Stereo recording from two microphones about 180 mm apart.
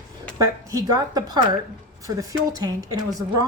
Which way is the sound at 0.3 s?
20° right (ahead or behind).